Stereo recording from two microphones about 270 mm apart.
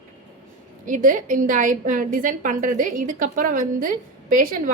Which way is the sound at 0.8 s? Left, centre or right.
Right.